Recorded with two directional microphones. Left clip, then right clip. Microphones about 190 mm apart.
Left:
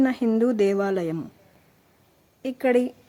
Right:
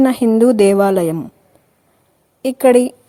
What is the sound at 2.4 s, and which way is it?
Speech, 35° right (ahead or behind).